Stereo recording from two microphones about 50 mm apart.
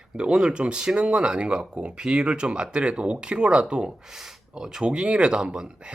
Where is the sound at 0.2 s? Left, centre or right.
Centre.